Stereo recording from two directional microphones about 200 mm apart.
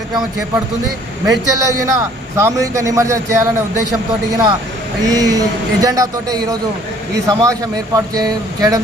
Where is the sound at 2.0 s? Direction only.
15° right (ahead or behind).